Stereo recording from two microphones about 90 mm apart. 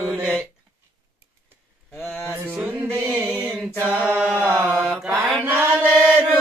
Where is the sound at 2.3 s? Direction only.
20° right (ahead or behind).